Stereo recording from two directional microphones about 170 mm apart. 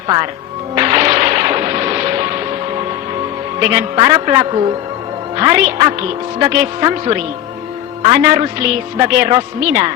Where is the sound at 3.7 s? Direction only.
25° right (ahead or behind).